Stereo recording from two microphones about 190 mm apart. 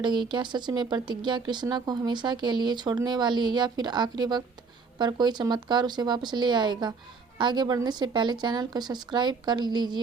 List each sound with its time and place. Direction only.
0.0 s speech: 25° right (ahead or behind)